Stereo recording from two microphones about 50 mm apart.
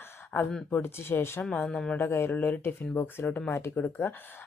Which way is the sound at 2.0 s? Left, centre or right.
Left.